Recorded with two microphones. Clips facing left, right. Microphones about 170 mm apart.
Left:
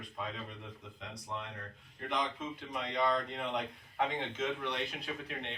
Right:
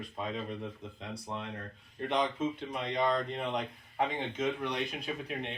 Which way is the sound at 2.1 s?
20° right (ahead or behind).